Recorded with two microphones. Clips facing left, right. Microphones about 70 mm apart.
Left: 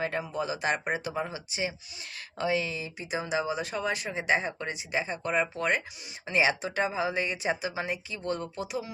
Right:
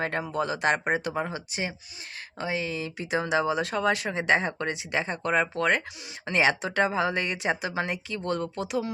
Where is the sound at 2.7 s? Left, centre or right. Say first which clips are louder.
Right 5 dB; right.